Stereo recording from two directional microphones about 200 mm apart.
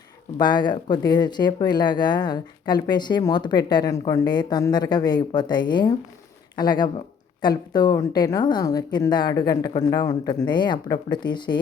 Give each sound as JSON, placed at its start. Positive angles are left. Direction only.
{"t": 0.3, "sound": "speech", "side_deg": 20}